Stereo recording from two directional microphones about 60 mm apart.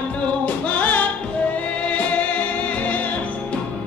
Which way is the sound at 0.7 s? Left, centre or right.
Left.